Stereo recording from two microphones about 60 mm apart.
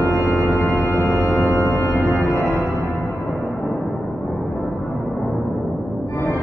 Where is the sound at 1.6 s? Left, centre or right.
Left.